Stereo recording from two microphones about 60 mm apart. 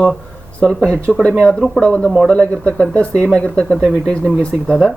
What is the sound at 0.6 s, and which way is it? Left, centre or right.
Speech, centre.